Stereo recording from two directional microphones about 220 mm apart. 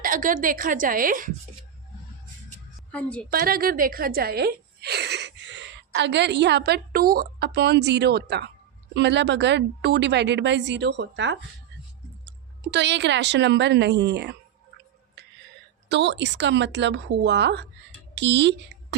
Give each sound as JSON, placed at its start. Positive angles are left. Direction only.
{"t": 0.0, "sound": "a woman's voice", "side_deg": -40}
{"t": 2.9, "sound": "a woman's voice", "side_deg": 5}
{"t": 3.2, "sound": "a woman's voice", "side_deg": -45}
{"t": 12.7, "sound": "a woman's voice", "side_deg": -50}
{"t": 15.9, "sound": "a woman's voice", "side_deg": -50}